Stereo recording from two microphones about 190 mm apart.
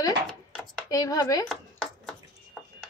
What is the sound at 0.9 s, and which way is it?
Speech, 20° left (ahead or behind).